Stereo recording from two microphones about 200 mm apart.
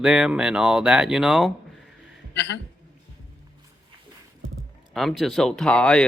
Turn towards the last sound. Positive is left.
turn(degrees=5)  # may be behind; listen again after turning